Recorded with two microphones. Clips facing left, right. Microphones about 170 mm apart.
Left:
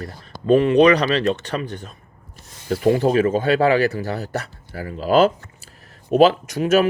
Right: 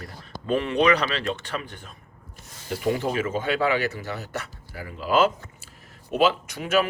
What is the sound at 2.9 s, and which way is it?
Speech, 35° left (ahead or behind).